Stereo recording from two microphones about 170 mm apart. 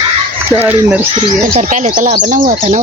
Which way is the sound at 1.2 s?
45° right (ahead or behind).